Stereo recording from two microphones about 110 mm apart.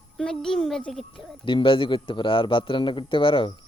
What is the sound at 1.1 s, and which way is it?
A man's voice, 50° left (ahead or behind).